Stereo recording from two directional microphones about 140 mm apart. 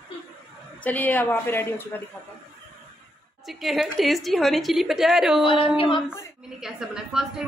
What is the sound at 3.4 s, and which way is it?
A woman's voice, centre (ahead or behind).